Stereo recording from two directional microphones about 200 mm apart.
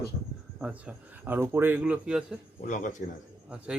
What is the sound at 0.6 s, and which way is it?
A man's voice, 5° right (ahead or behind).